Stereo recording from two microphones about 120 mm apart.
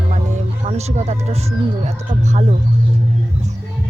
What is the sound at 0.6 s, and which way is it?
Speech, 65° right (ahead or behind).